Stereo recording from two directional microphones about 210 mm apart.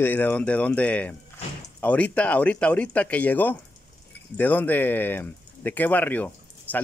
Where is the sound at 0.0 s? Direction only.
10° left (ahead or behind).